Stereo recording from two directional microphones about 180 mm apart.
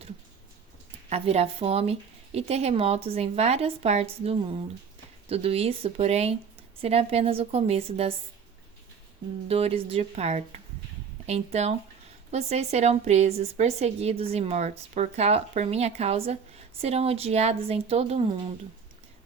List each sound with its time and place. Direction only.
1.1 s a woman's voice: 35° right (ahead or behind)
9.5 s a woman's voice: 35° right (ahead or behind)